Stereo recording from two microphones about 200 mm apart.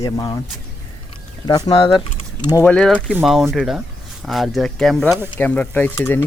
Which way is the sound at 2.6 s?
5° left (ahead or behind).